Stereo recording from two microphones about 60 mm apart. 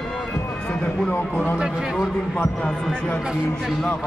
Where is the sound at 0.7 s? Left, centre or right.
Left.